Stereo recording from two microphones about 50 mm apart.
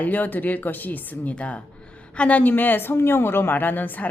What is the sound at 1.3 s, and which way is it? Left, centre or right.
A woman's voice, left.